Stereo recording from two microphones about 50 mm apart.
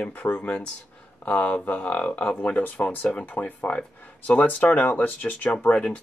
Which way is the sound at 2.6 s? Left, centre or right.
Left.